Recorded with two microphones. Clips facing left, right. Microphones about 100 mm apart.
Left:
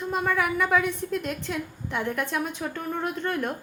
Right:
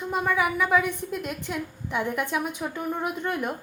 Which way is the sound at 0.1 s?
5° right (ahead or behind).